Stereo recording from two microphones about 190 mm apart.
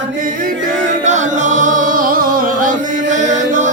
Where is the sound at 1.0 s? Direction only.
40° right (ahead or behind).